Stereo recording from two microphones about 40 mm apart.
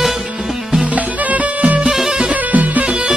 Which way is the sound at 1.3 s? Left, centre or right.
Right.